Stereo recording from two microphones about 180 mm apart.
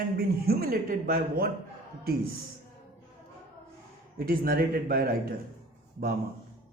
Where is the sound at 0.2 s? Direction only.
55° right (ahead or behind).